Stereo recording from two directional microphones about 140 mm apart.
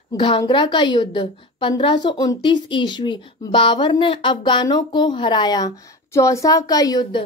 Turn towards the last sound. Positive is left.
turn(degrees=30)  # may be behind; listen again after turning